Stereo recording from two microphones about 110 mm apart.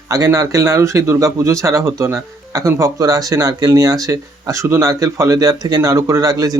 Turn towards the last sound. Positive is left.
turn(degrees=-35)  # may be behind; listen again after turning